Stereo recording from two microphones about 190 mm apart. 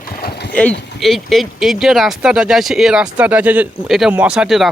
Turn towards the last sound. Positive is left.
turn(degrees=-5)  # may be behind; listen again after turning